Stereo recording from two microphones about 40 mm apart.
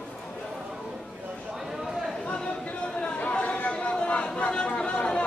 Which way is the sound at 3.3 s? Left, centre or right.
Left.